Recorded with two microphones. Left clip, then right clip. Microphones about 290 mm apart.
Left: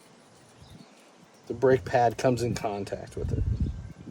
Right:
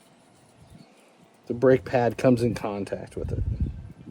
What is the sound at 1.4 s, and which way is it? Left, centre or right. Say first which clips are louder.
Speech: right 3 dB; right.